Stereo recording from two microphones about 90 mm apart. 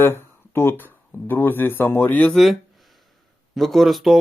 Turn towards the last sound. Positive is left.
turn(degrees=0)  # may be behind; listen again after turning